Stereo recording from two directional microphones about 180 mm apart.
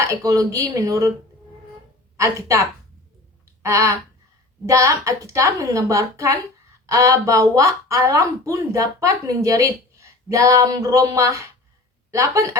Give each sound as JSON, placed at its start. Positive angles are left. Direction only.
{"t": 0.0, "sound": "a woman's voice", "side_deg": -15}
{"t": 2.1, "sound": "a woman's voice", "side_deg": -15}